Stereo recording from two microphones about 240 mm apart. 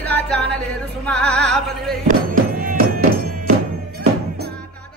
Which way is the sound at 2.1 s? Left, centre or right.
Right.